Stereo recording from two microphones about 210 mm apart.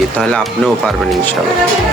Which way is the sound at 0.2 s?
5° left (ahead or behind).